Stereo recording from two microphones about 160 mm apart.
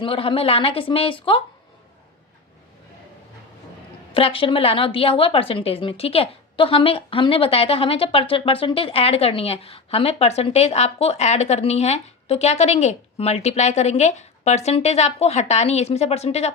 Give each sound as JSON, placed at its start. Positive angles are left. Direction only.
{"t": 0.0, "sound": "a woman's voice", "side_deg": 35}
{"t": 4.1, "sound": "a woman's voice", "side_deg": 35}